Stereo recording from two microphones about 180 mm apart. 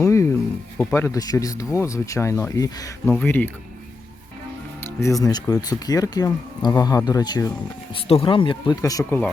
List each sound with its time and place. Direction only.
0.0 s music: 15° left (ahead or behind)
0.8 s speech: 10° left (ahead or behind)
5.0 s speech: 20° left (ahead or behind)